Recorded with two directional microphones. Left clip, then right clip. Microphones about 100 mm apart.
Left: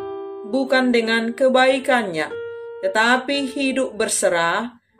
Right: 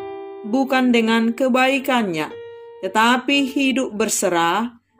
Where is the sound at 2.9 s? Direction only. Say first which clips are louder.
Right 2 dB; 75° right (ahead or behind).